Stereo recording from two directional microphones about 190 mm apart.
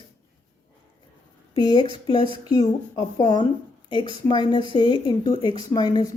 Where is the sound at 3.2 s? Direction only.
20° left (ahead or behind).